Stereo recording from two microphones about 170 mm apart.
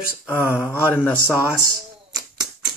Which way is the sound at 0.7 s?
10° left (ahead or behind).